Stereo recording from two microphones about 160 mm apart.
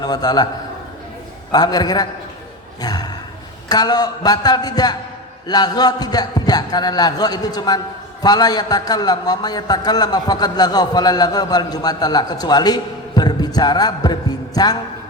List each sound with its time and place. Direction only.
0.0 s a man's voice: 25° left (ahead or behind)
1.5 s a man's voice: 25° left (ahead or behind)